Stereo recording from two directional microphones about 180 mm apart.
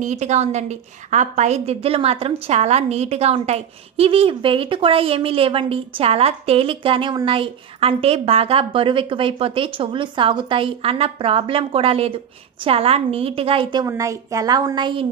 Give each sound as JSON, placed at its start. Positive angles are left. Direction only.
{"t": 0.0, "sound": "a woman's voice", "side_deg": -40}